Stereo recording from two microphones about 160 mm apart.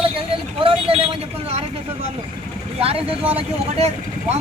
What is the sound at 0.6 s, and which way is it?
Vehicle, 35° right (ahead or behind).